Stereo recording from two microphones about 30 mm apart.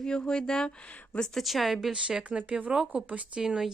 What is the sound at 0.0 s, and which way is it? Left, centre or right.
Speech, left.